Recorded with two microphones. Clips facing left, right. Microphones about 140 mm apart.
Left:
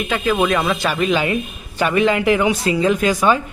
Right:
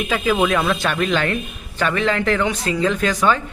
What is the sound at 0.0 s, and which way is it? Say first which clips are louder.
Speech: even; centre (ahead or behind).